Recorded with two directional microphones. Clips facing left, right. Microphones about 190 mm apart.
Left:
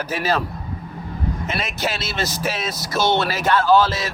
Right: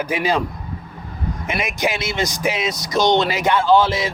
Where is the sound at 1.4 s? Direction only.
15° right (ahead or behind).